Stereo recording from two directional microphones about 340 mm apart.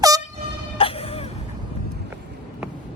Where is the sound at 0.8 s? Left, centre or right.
Centre.